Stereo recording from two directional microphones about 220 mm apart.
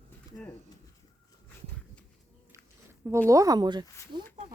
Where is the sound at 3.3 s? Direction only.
15° right (ahead or behind).